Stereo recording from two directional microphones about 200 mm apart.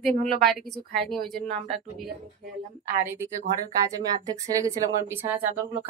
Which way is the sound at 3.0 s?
15° right (ahead or behind).